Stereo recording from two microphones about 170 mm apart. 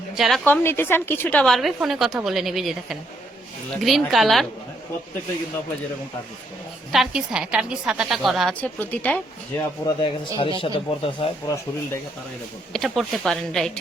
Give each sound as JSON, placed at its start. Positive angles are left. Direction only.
{"t": 0.2, "sound": "a woman's voice", "side_deg": 0}
{"t": 0.4, "sound": "a woman's voice", "side_deg": 10}
{"t": 6.9, "sound": "a woman's voice", "side_deg": -5}
{"t": 8.6, "sound": "a woman's voice", "side_deg": 10}
{"t": 9.6, "sound": "a man's voice", "side_deg": 25}
{"t": 12.7, "sound": "a woman's voice", "side_deg": 0}